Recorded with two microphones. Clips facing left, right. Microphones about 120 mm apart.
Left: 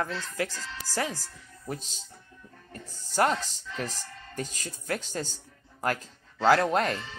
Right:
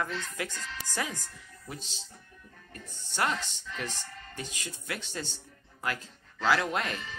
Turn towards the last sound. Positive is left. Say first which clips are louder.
# left 6 dB
turn(degrees=35)  # may be behind; listen again after turning